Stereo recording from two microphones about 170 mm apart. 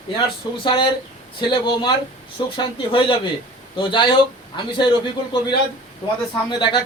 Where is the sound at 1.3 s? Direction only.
30° left (ahead or behind).